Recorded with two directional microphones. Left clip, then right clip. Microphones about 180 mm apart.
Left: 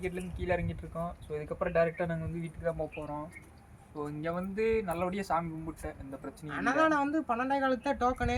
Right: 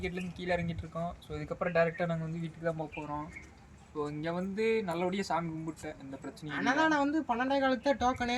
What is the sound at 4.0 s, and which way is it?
Speech, 5° left (ahead or behind).